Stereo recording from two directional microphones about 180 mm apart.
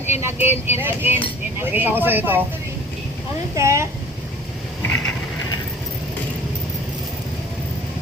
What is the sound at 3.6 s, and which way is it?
Speech, 15° right (ahead or behind).